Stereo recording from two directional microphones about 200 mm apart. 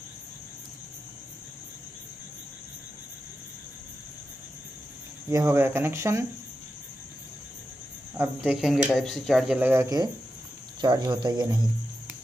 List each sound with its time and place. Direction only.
5.3 s speech: 15° right (ahead or behind)
8.2 s speech: 5° right (ahead or behind); by 11.6 s 20° right (ahead or behind)